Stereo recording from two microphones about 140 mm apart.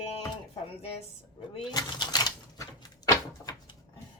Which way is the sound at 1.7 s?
30° left (ahead or behind).